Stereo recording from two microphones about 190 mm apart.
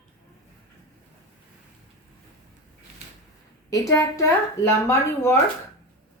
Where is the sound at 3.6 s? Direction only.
15° left (ahead or behind).